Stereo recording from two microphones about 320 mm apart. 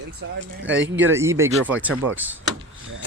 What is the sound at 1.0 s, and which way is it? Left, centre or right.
Speech, centre.